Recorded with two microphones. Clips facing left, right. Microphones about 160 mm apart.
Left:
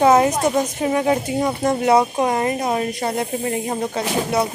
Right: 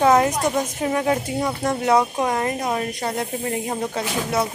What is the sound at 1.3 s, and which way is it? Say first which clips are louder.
Speech: left 3 dB; 15° left (ahead or behind).